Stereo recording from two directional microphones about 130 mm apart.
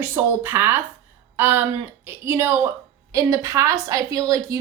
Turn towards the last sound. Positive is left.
turn(degrees=-25)  # may be behind; listen again after turning